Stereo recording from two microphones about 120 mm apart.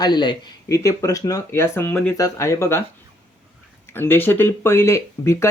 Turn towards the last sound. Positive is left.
turn(degrees=25)  # may be behind; listen again after turning